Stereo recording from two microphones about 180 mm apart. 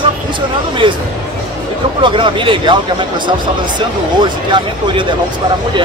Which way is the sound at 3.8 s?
25° right (ahead or behind).